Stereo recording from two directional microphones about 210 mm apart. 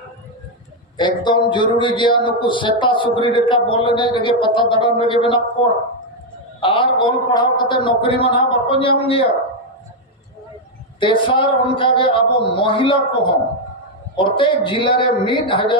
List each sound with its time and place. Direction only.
0.9 s a man's voice: 20° left (ahead or behind)
6.6 s a man's voice: 25° left (ahead or behind)
11.0 s a man's voice: 25° left (ahead or behind)
14.1 s a man's voice: 25° left (ahead or behind)